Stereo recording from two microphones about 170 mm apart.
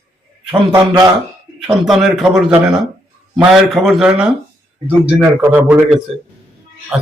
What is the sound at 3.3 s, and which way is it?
Speech, centre (ahead or behind).